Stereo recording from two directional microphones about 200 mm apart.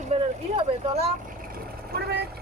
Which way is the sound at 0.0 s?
35° right (ahead or behind).